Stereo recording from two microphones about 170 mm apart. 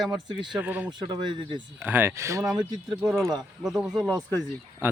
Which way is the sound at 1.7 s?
10° right (ahead or behind).